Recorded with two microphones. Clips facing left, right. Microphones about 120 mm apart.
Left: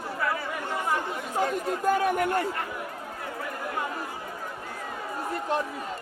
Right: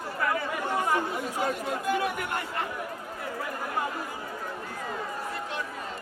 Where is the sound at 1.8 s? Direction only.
45° left (ahead or behind).